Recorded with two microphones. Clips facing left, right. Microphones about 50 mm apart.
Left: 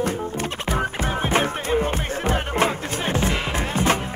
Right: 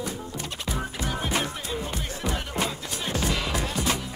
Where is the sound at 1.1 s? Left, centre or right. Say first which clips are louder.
Left 6 dB; left.